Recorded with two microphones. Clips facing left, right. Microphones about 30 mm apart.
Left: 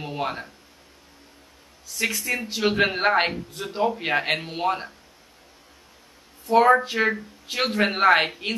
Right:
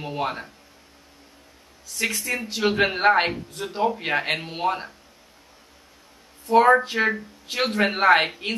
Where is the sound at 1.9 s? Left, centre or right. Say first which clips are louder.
Even; centre.